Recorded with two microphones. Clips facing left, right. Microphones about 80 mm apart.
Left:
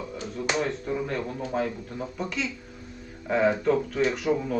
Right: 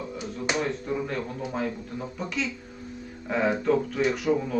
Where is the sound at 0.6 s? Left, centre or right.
Centre.